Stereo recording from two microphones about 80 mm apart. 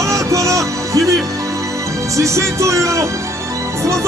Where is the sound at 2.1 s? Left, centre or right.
Right.